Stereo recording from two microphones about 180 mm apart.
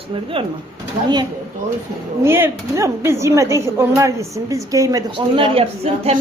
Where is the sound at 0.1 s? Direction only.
30° right (ahead or behind).